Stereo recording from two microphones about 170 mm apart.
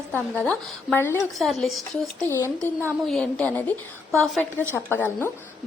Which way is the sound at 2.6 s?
15° right (ahead or behind).